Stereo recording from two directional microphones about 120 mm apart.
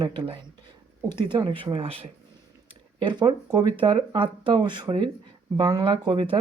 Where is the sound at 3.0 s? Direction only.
40° right (ahead or behind).